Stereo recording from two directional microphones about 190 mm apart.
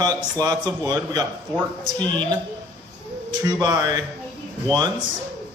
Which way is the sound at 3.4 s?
20° right (ahead or behind).